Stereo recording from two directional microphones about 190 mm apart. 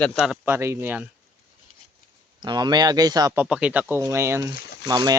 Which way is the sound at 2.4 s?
25° right (ahead or behind).